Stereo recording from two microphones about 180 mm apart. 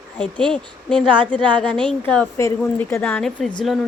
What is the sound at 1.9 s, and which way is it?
A woman's voice, 5° left (ahead or behind).